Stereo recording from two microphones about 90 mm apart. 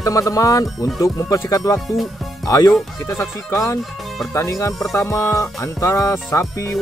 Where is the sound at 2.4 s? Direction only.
40° left (ahead or behind).